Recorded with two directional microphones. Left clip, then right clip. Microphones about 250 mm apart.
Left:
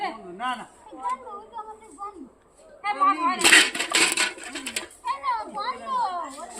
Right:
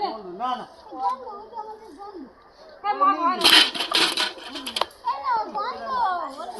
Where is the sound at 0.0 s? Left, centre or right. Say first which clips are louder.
Right 2 dB; left.